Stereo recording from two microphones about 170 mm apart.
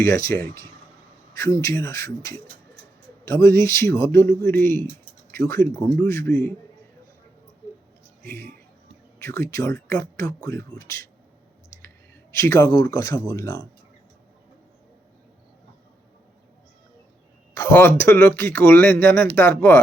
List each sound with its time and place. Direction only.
0.0 s speech: 15° left (ahead or behind)
8.2 s a man's voice: 15° left (ahead or behind)
12.3 s speech: 15° left (ahead or behind)
17.5 s speech: 20° left (ahead or behind)